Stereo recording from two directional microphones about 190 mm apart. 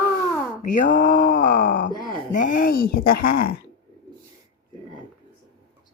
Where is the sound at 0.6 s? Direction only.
45° left (ahead or behind).